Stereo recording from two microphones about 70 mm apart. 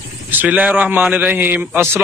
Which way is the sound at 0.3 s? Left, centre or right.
Right.